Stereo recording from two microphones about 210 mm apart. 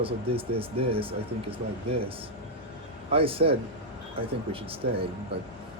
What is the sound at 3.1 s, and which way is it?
Speech, 25° right (ahead or behind).